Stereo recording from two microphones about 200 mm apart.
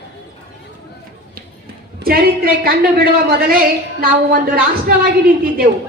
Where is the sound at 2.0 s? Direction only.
50° right (ahead or behind).